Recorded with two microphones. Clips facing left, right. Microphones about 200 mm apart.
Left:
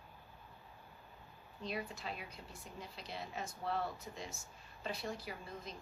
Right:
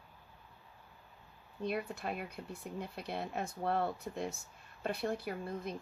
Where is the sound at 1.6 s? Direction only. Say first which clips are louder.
Right 6 dB; 55° right (ahead or behind).